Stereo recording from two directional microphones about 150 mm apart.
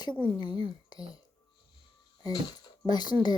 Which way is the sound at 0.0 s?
30° left (ahead or behind).